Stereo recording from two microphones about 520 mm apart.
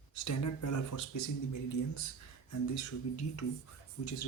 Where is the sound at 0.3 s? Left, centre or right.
Left.